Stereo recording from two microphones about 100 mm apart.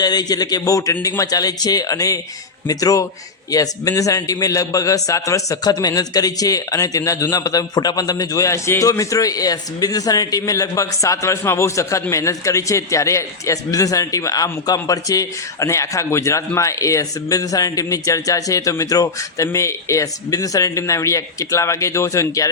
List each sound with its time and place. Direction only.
0.0 s a man's voice: 40° left (ahead or behind)